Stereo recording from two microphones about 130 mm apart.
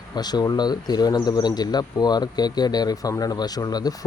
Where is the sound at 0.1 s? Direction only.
30° left (ahead or behind).